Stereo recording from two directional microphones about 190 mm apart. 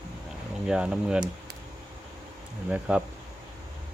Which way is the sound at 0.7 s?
5° right (ahead or behind).